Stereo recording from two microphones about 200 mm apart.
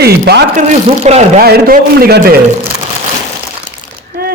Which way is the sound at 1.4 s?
50° right (ahead or behind).